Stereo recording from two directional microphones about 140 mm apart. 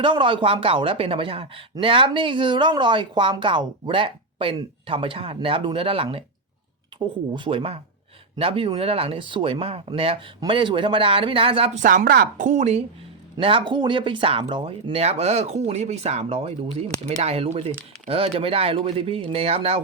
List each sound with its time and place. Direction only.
0.0 s speech: 35° right (ahead or behind)
7.3 s speech: 40° right (ahead or behind)
11.8 s a woman's voice: 75° right (ahead or behind); by 12.8 s 55° right (ahead or behind)
13.4 s speech: 35° right (ahead or behind)